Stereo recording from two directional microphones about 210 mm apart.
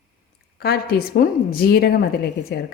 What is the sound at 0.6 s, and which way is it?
A woman's voice, 45° left (ahead or behind).